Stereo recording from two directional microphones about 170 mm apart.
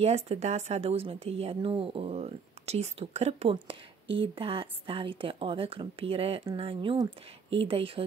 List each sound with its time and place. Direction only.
0.0 s a woman's voice: 40° right (ahead or behind)